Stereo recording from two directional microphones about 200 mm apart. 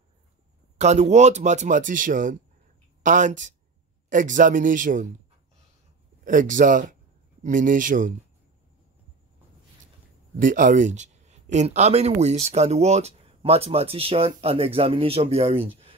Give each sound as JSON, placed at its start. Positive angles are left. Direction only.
{"t": 0.7, "sound": "speech", "side_deg": -35}
{"t": 6.2, "sound": "speech", "side_deg": -40}
{"t": 10.3, "sound": "speech", "side_deg": -40}